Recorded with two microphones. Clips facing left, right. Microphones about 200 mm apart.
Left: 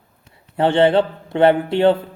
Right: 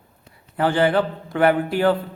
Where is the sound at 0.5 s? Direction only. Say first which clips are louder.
Left 4 dB; 25° left (ahead or behind).